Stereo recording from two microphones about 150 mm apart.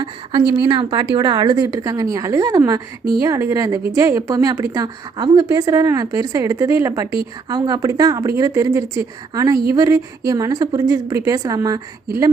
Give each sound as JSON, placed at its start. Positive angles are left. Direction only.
{"t": 0.0, "sound": "a woman's voice", "side_deg": -30}